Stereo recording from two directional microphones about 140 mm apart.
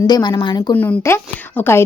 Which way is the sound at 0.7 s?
10° left (ahead or behind).